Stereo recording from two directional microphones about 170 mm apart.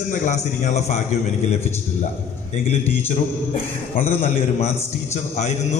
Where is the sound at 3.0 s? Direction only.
35° left (ahead or behind).